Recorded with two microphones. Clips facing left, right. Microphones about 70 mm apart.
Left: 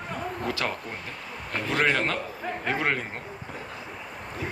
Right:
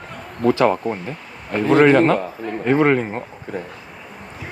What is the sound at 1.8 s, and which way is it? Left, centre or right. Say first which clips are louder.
Speech: right 11 dB; right.